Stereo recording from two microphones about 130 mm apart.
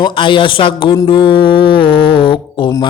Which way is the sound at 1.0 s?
40° left (ahead or behind).